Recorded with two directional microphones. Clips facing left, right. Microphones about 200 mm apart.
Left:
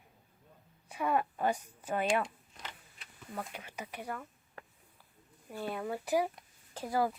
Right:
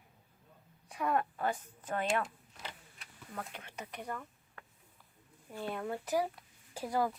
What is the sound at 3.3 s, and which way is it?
Speech, 10° left (ahead or behind).